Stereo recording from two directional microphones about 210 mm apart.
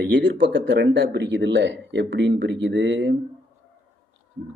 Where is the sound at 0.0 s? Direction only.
60° right (ahead or behind).